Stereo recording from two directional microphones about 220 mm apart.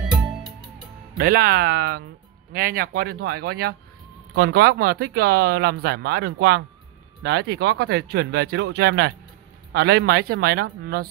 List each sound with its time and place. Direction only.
1.1 s speech: 40° right (ahead or behind)